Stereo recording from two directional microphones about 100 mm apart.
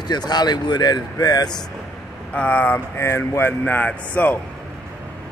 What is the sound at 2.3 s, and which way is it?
Speech, 15° left (ahead or behind).